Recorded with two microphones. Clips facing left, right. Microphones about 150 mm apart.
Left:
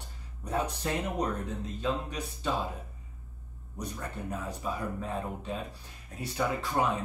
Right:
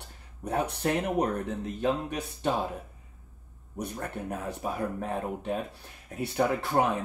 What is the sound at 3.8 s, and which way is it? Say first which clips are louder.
Speech: right 3 dB; 55° right (ahead or behind).